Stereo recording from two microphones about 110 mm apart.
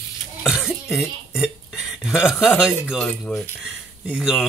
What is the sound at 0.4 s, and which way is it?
Cough, 5° right (ahead or behind).